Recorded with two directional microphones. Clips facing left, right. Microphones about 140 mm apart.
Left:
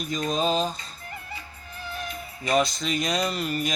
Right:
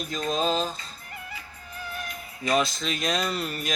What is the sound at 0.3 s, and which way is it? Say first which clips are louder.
Speech: left 1 dB; centre (ahead or behind).